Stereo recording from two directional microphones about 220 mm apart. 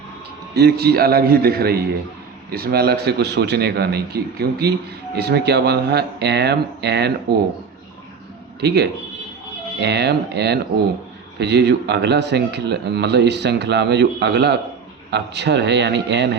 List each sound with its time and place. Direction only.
0.5 s a man's voice: 45° right (ahead or behind)
8.6 s a man's voice: 50° right (ahead or behind)